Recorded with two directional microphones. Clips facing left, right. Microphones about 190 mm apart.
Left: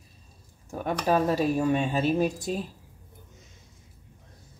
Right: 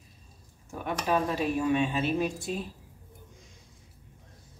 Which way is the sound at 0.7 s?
40° left (ahead or behind).